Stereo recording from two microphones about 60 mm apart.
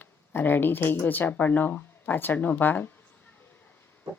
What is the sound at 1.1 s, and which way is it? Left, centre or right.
Speech, left.